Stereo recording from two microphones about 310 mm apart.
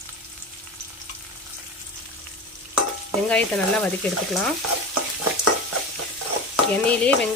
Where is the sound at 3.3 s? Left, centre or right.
Centre.